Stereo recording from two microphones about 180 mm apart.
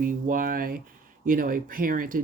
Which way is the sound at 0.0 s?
50° right (ahead or behind).